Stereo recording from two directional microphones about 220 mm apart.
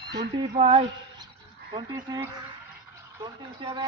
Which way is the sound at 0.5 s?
30° right (ahead or behind).